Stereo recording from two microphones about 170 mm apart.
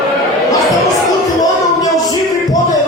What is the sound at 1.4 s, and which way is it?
Music, 20° left (ahead or behind).